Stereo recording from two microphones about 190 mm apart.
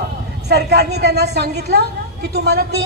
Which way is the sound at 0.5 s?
60° right (ahead or behind).